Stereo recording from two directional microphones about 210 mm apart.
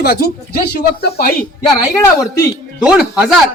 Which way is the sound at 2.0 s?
15° left (ahead or behind).